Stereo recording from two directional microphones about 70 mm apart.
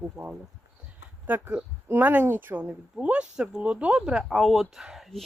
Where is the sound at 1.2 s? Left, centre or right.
Right.